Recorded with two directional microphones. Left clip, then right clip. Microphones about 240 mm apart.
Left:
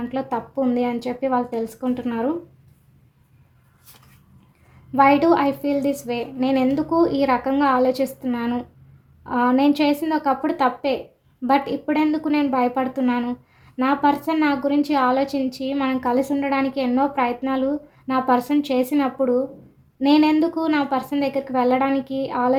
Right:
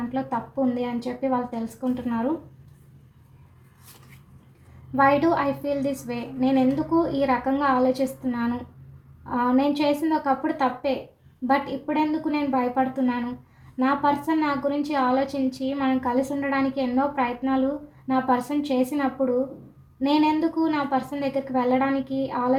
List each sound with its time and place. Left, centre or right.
0.1 s a woman's voice: left
4.9 s a woman's voice: left